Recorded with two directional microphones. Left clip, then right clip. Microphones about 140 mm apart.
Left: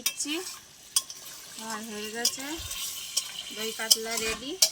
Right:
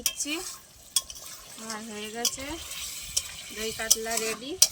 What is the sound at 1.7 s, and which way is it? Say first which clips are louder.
Speech: left 1 dB; 25° right (ahead or behind).